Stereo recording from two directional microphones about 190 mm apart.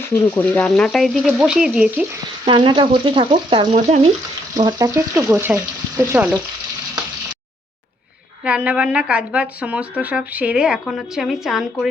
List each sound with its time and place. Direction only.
0.1 s frying: 10° left (ahead or behind)
2.4 s speech: 25° right (ahead or behind)
4.5 s speech: 20° right (ahead or behind)
8.4 s speech: 5° right (ahead or behind)